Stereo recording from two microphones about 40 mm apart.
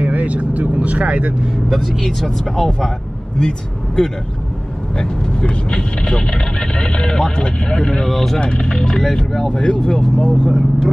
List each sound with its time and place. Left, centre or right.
0.0 s speech: right
1.7 s speech: centre; by 8.1 s left
8.1 s speech: centre
8.4 s speech: left